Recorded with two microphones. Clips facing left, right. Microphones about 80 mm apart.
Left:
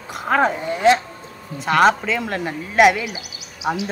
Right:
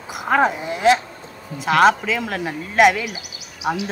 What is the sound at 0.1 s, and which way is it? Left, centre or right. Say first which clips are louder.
A woman's voice: even; centre.